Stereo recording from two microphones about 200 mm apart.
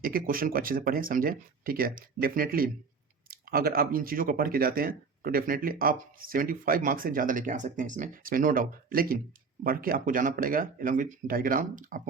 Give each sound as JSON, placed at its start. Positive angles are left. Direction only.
{"t": 0.0, "sound": "speech", "side_deg": -45}